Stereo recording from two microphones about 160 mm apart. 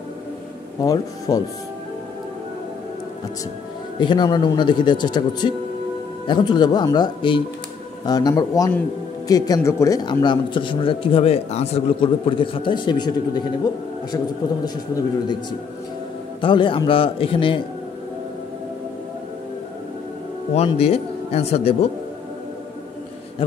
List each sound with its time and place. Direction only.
0.8 s speech: 20° left (ahead or behind)
4.0 s speech: 30° left (ahead or behind)
16.3 s speech: 30° left (ahead or behind)
20.5 s speech: 40° left (ahead or behind)